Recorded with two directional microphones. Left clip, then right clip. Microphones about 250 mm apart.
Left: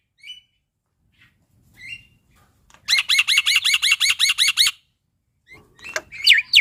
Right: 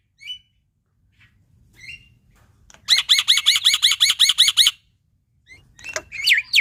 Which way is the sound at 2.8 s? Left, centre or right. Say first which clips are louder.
Right 2 dB; centre.